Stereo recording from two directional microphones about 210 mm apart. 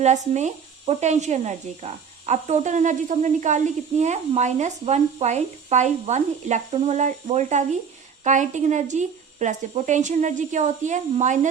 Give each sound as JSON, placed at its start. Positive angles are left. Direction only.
{"t": 0.0, "sound": "speech", "side_deg": -35}